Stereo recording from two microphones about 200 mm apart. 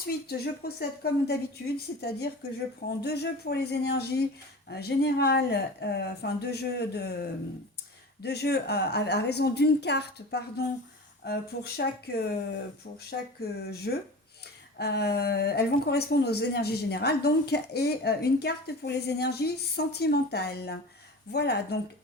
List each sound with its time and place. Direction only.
0.0 s a woman's voice: 50° left (ahead or behind)